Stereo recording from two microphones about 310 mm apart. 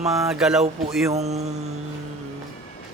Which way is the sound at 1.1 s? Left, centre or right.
Right.